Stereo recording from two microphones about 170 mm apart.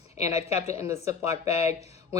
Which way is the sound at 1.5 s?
40° left (ahead or behind).